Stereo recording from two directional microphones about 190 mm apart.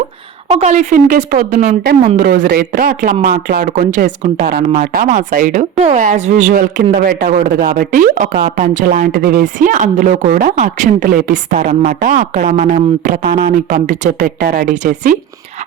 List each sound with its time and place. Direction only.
0.6 s speech: 35° right (ahead or behind); by 7.3 s 55° right (ahead or behind)
7.3 s speech: 40° right (ahead or behind)